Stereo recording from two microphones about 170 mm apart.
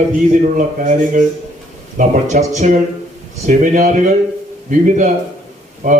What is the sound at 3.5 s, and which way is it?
A man's voice, 45° right (ahead or behind).